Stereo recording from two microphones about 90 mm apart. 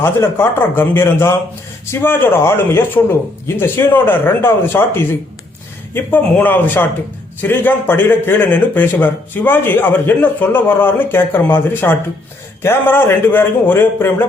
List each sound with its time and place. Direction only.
0.0 s speech: 25° left (ahead or behind)